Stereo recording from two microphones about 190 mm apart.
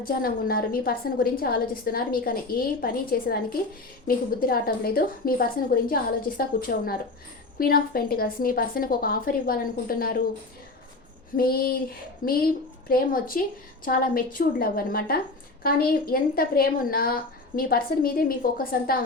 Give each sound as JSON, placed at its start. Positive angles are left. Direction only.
{"t": 0.0, "sound": "a woman's voice", "side_deg": 50}
{"t": 11.3, "sound": "a woman's voice", "side_deg": 50}